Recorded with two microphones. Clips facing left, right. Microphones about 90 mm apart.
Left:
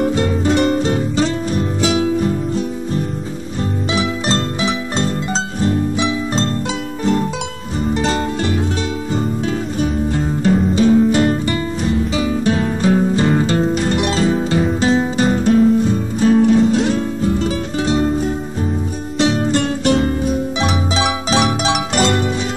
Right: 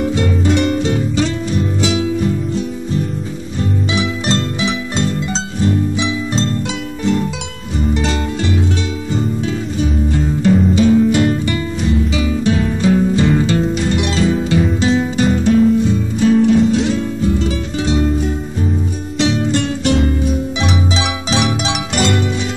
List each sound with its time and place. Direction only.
0.0 s music: 40° left (ahead or behind)
7.9 s music: 40° left (ahead or behind)
9.8 s music: 40° left (ahead or behind)